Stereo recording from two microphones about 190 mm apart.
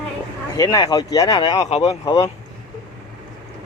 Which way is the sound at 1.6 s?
35° left (ahead or behind).